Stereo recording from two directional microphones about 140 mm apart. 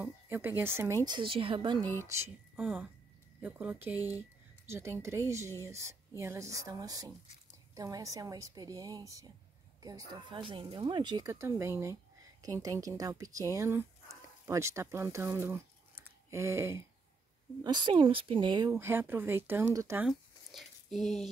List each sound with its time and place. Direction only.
0.0 s speech: 15° right (ahead or behind); by 1.9 s 35° right (ahead or behind)
2.0 s speech: 20° right (ahead or behind)
10.4 s speech: 40° right (ahead or behind); by 16.8 s 20° right (ahead or behind)
17.6 s speech: 35° right (ahead or behind)
18.7 s speech: 15° right (ahead or behind)
20.1 s a sound: centre (ahead or behind)